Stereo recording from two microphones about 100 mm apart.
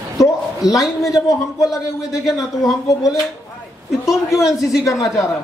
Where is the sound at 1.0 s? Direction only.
35° left (ahead or behind).